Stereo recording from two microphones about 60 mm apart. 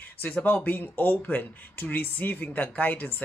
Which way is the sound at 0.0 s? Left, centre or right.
Left.